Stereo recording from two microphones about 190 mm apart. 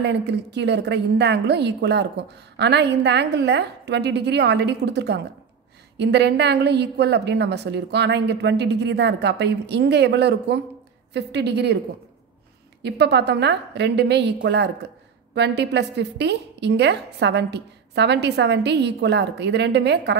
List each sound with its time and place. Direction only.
0.0 s a woman's voice: 65° right (ahead or behind)
12.8 s a woman's voice: 60° right (ahead or behind)